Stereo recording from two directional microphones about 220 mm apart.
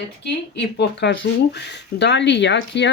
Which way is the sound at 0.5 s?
50° left (ahead or behind).